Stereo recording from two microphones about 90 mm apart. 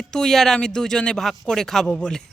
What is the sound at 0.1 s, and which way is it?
Speech, 5° left (ahead or behind).